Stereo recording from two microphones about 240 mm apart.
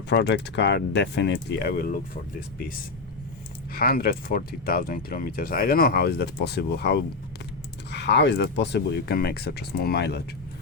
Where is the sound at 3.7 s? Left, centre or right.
Left.